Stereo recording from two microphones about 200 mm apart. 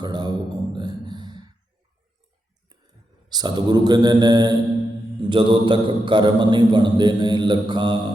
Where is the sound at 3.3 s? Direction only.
20° right (ahead or behind).